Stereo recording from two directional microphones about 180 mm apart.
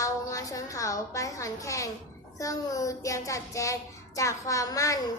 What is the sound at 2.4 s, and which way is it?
Child singing, 20° left (ahead or behind).